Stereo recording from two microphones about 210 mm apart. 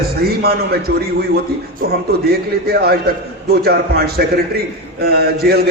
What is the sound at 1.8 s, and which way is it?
A man's voice, 45° right (ahead or behind).